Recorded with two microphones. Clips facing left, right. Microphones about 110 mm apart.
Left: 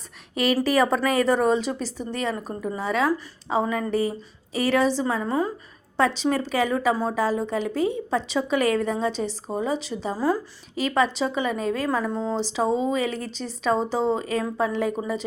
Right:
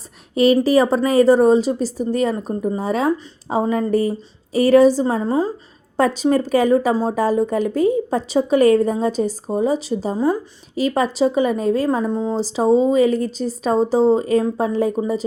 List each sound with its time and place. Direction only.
0.3 s speech: 35° right (ahead or behind)
6.0 s a woman's voice: 45° right (ahead or behind)
10.2 s speech: 20° right (ahead or behind)
10.8 s speech: 40° right (ahead or behind)
11.9 s speech: 20° right (ahead or behind)
12.4 s speech: 40° right (ahead or behind)